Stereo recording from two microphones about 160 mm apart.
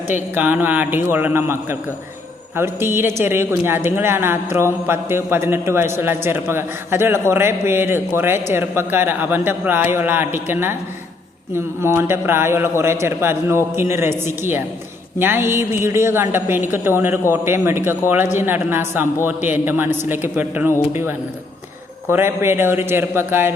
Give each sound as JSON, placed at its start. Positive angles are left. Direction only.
{"t": 0.3, "sound": "a man's voice", "side_deg": -10}
{"t": 2.6, "sound": "a man's voice", "side_deg": -15}
{"t": 22.1, "sound": "a man's voice", "side_deg": -15}